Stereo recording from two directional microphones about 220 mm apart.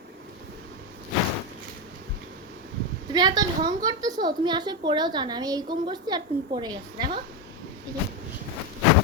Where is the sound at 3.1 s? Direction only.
20° right (ahead or behind).